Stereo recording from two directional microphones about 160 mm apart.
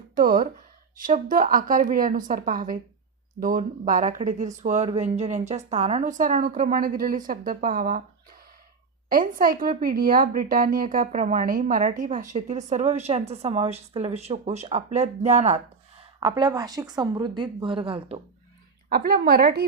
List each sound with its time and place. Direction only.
0.1 s a woman's voice: 60° right (ahead or behind)
9.0 s a woman's voice: 60° right (ahead or behind); by 15.6 s 45° right (ahead or behind)
16.2 s a woman's voice: 25° right (ahead or behind)
18.9 s a woman's voice: 70° right (ahead or behind)